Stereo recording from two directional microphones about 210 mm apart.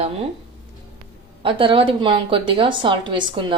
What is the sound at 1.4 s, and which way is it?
Speech, 25° right (ahead or behind).